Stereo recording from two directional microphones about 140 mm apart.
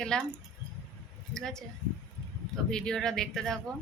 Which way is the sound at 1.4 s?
5° left (ahead or behind).